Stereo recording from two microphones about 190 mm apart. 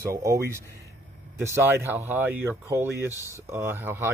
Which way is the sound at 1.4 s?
15° right (ahead or behind).